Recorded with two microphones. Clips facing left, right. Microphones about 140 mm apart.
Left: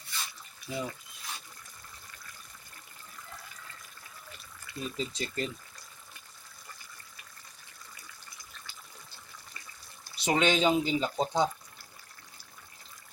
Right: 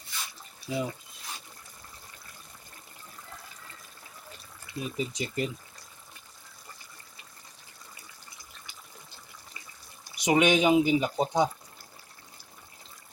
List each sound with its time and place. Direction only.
0.7 s speech: 15° right (ahead or behind)
4.6 s speech: 15° right (ahead or behind)
10.0 s speech: 15° right (ahead or behind)